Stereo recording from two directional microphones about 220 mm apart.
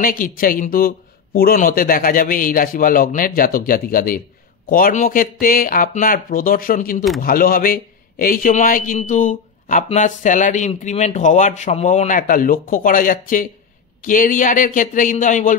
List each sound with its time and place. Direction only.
0.0 s a man's voice: 40° left (ahead or behind)